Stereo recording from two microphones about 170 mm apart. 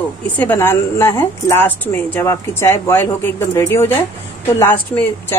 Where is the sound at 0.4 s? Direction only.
10° left (ahead or behind).